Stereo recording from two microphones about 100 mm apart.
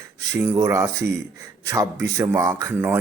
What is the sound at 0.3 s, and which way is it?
Speech, 20° right (ahead or behind).